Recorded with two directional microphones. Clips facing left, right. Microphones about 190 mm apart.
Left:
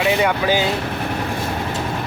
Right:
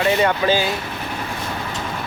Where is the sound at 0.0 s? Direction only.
10° left (ahead or behind).